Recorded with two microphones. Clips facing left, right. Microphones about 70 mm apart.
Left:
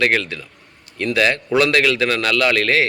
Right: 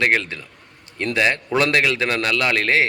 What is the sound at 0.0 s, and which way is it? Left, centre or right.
A man's voice, right.